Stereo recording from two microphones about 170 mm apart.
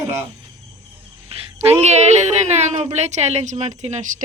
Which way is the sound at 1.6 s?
40° right (ahead or behind).